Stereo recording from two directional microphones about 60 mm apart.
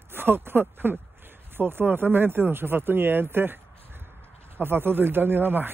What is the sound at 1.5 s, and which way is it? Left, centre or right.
Speech, right.